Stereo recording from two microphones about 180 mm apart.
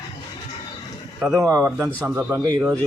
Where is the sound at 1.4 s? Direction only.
15° right (ahead or behind).